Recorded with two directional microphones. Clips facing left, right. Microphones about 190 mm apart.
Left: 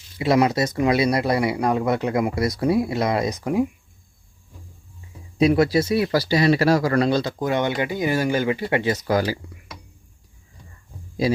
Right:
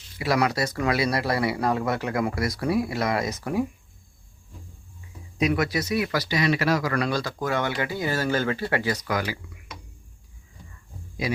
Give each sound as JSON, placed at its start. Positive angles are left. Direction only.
{"t": 0.2, "sound": "speech", "side_deg": 25}
{"t": 5.4, "sound": "speech", "side_deg": 30}
{"t": 11.2, "sound": "speech", "side_deg": 30}